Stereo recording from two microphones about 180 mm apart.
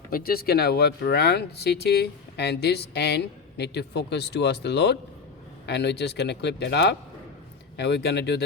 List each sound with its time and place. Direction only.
0.1 s speech: 55° left (ahead or behind)